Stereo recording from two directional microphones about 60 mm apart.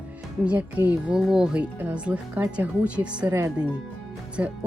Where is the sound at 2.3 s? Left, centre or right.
Right.